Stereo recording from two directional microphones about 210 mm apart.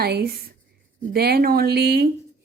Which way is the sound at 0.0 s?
50° right (ahead or behind).